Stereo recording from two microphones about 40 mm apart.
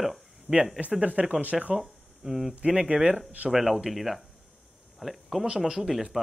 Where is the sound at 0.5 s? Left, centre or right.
Right.